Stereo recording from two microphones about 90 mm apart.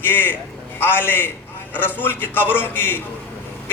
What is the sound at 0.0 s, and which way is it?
A man's voice, 25° left (ahead or behind).